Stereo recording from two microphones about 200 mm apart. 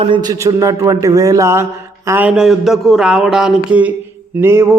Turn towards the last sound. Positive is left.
turn(degrees=-10)  # may be behind; listen again after turning